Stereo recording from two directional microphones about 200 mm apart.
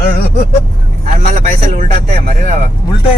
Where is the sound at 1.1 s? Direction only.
40° right (ahead or behind).